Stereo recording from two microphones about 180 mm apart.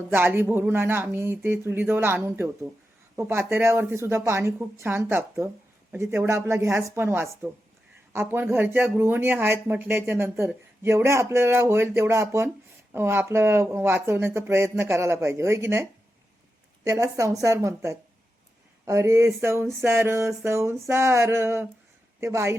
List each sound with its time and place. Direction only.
0.1 s speech: 10° right (ahead or behind)